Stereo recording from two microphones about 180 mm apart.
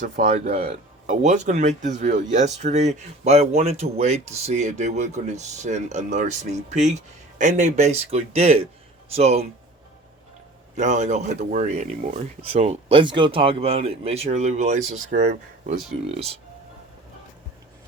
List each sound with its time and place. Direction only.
0.0 s speech: 40° right (ahead or behind)
10.8 s speech: 40° right (ahead or behind)